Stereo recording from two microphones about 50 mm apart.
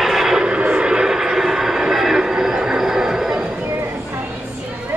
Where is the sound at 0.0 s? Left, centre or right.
Centre.